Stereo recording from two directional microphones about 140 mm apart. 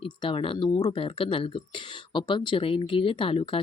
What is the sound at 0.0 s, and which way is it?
Speech, 40° left (ahead or behind).